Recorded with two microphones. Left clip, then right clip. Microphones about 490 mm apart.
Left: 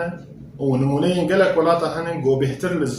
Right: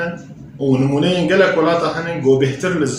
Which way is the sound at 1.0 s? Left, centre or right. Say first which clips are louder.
Right 3 dB; left.